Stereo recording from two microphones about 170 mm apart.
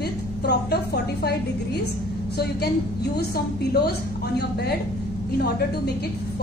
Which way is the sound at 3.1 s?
70° left (ahead or behind).